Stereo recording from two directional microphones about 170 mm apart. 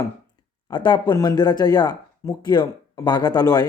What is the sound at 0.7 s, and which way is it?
Speech, 30° left (ahead or behind).